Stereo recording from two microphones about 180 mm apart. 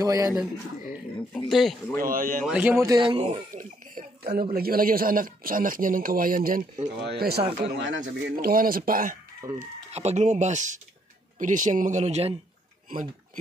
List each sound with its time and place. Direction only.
0.0 s speech: 20° right (ahead or behind)
1.3 s speech: centre (ahead or behind)
2.0 s speech: 50° right (ahead or behind)
2.4 s a man's voice: 5° right (ahead or behind)
2.9 s speech: 30° right (ahead or behind)
3.5 s speech: 55° right (ahead or behind)
7.0 s speech: 65° right (ahead or behind)
7.7 s speech: 85° right
8.0 s speech: 55° right (ahead or behind)
9.6 s speech: 35° right (ahead or behind)